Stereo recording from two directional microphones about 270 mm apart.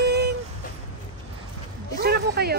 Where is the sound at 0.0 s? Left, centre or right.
Right.